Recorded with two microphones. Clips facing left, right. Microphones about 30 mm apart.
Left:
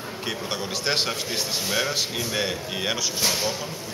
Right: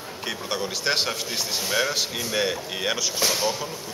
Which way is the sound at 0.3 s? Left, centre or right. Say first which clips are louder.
Right 1 dB; centre.